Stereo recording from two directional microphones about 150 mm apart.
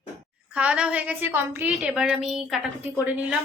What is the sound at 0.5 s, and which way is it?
A woman's voice, 10° right (ahead or behind).